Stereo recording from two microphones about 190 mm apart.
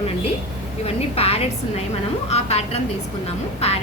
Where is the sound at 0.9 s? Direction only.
30° left (ahead or behind).